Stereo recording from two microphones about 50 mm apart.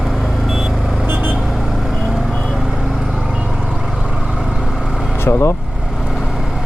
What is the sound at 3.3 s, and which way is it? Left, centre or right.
Vehicle, right.